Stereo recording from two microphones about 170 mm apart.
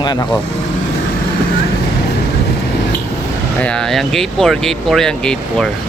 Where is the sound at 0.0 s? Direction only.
25° left (ahead or behind).